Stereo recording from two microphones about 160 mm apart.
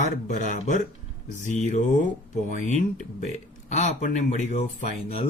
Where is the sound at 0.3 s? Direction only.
50° left (ahead or behind).